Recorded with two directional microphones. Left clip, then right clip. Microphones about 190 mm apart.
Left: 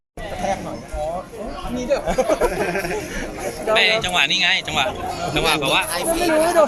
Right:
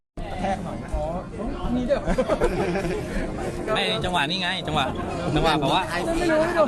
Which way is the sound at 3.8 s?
45° right (ahead or behind).